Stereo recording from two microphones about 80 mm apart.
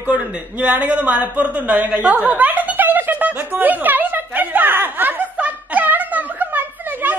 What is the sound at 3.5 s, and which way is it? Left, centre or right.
Snicker, right.